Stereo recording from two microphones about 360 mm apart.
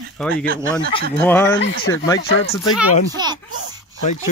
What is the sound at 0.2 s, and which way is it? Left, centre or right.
Speech, centre.